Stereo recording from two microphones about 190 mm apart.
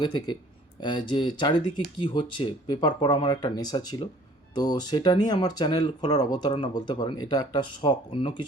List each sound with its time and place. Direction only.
0.8 s speech: 25° left (ahead or behind)